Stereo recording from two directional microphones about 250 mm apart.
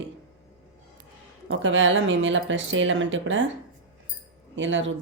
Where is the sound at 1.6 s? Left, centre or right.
Right.